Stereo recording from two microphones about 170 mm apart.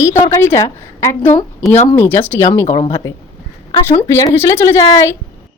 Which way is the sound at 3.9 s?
15° left (ahead or behind).